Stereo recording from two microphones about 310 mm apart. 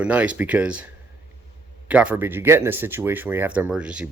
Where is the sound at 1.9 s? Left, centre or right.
Centre.